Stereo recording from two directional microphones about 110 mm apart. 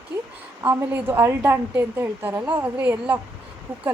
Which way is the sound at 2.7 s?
15° right (ahead or behind).